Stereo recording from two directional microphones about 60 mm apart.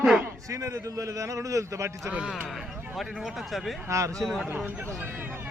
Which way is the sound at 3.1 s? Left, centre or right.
Centre.